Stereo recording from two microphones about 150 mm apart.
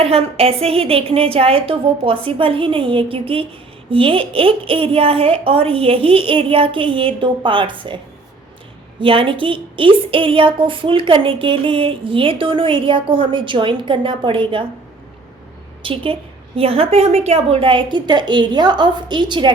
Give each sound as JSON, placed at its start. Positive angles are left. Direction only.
{"t": 0.0, "sound": "a woman's voice", "side_deg": -40}
{"t": 9.0, "sound": "a woman's voice", "side_deg": -35}
{"t": 15.8, "sound": "a woman's voice", "side_deg": -35}